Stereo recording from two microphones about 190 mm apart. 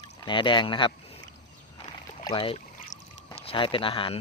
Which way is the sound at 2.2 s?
25° left (ahead or behind).